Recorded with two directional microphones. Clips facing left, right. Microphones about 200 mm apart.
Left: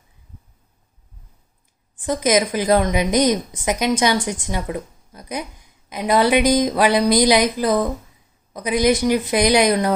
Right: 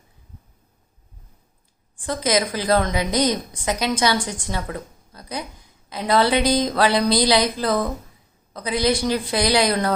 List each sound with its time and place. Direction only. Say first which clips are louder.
2.0 s a woman's voice: left 3 dB; 20° left (ahead or behind)